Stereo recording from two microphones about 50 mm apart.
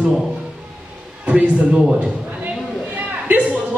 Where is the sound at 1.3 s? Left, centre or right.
Right.